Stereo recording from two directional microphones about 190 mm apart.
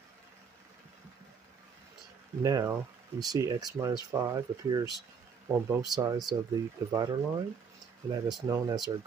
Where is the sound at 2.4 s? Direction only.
15° right (ahead or behind).